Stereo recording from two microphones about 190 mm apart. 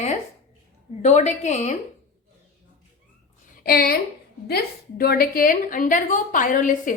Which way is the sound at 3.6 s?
50° left (ahead or behind).